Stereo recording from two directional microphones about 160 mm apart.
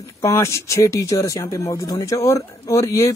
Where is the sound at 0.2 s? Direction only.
20° left (ahead or behind).